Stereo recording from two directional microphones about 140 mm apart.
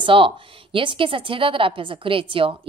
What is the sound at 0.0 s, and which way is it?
A woman's voice, 40° right (ahead or behind).